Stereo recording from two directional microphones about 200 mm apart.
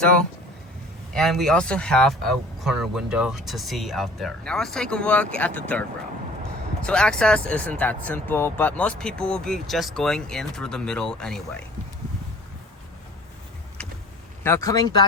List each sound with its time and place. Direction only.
1.1 s speech: centre (ahead or behind)
6.8 s speech: 5° left (ahead or behind)
14.4 s speech: 15° left (ahead or behind)